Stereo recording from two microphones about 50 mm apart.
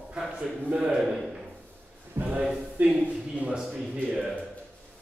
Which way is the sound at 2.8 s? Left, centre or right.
Right.